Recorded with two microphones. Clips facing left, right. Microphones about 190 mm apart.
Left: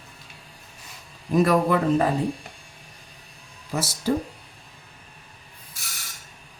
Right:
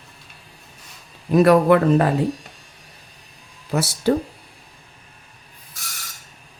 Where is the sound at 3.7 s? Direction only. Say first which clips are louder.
Right 6 dB; 65° right (ahead or behind).